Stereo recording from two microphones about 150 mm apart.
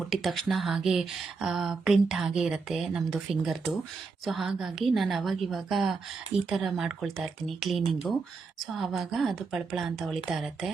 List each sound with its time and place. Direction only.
0.1 s speech: centre (ahead or behind)